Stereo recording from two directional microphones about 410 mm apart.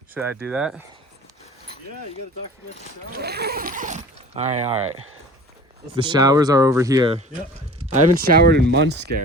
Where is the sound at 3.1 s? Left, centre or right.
Right.